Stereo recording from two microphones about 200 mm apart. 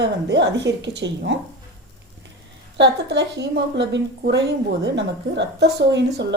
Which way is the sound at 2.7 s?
60° right (ahead or behind).